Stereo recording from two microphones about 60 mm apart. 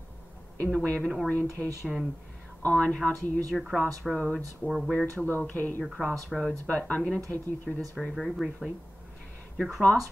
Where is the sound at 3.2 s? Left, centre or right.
Right.